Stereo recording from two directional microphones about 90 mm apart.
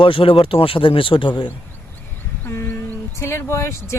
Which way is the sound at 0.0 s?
80° left.